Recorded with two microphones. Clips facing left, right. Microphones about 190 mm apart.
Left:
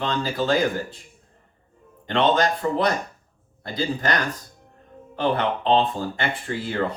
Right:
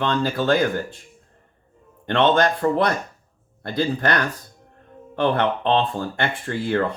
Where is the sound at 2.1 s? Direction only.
55° right (ahead or behind).